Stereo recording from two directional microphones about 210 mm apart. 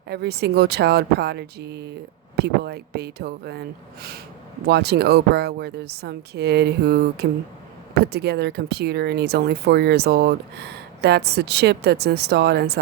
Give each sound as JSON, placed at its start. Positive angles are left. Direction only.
{"t": 0.1, "sound": "speech", "side_deg": -50}